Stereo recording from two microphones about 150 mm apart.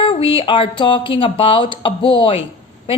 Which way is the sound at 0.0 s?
35° left (ahead or behind).